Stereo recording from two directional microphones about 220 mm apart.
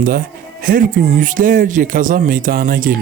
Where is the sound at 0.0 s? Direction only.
40° right (ahead or behind).